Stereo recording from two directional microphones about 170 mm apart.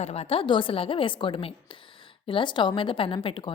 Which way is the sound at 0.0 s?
35° left (ahead or behind).